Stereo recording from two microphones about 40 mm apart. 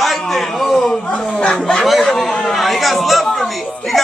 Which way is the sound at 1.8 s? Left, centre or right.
Centre.